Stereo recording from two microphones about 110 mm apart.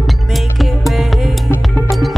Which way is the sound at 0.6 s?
Centre (ahead or behind).